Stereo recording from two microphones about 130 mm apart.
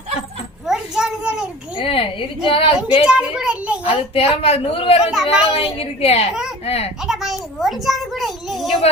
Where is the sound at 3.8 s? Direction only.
45° left (ahead or behind).